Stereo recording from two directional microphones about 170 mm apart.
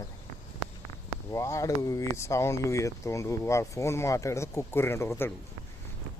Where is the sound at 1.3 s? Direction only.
20° left (ahead or behind).